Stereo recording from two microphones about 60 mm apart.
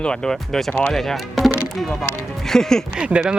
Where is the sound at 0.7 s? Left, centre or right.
Left.